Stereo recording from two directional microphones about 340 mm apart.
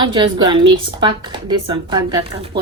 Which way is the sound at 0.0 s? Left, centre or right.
Centre.